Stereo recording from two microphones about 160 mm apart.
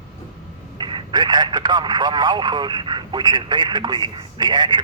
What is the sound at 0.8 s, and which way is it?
Speech, 30° right (ahead or behind).